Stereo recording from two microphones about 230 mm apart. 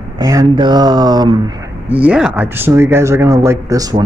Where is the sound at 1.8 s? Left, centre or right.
Centre.